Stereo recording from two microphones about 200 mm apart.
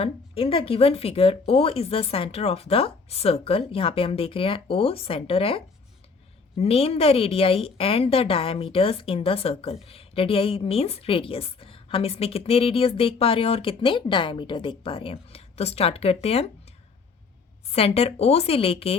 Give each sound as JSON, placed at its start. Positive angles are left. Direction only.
{"t": 0.0, "sound": "a woman's voice", "side_deg": 30}
{"t": 17.7, "sound": "a woman's voice", "side_deg": 30}